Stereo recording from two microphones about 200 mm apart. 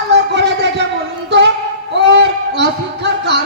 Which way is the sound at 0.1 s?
60° right (ahead or behind).